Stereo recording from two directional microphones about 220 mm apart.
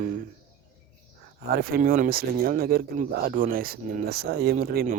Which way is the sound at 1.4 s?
45° right (ahead or behind).